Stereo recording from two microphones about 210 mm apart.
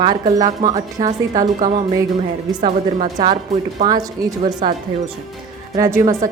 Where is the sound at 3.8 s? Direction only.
20° right (ahead or behind).